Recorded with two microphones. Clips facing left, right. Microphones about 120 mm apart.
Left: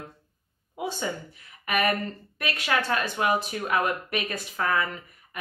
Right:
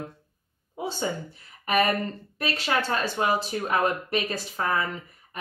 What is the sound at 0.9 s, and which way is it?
Speech, 30° right (ahead or behind).